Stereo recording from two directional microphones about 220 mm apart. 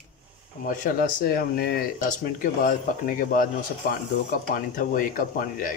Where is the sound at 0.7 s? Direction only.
40° left (ahead or behind).